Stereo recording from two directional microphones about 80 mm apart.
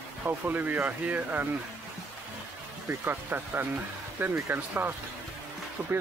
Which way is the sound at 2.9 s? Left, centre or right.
Right.